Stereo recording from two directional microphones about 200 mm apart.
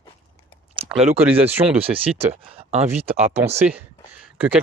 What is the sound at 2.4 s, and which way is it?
Speech, 30° right (ahead or behind).